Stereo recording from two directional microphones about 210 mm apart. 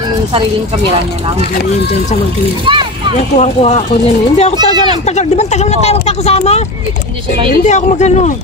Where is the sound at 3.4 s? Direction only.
30° left (ahead or behind).